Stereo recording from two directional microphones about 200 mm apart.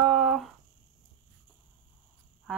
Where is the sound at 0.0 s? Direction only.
Centre (ahead or behind).